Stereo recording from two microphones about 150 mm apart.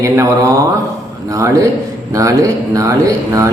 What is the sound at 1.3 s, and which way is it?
A man's voice, 20° right (ahead or behind).